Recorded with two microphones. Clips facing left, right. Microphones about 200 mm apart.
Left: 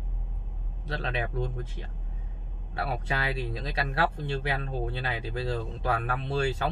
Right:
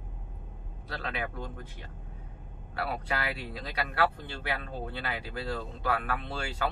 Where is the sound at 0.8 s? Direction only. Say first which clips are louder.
Left 3 dB; 25° left (ahead or behind).